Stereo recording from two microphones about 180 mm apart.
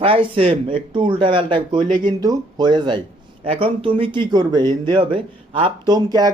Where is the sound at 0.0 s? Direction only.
30° right (ahead or behind).